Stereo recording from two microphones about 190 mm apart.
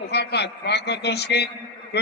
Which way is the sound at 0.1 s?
60° left (ahead or behind).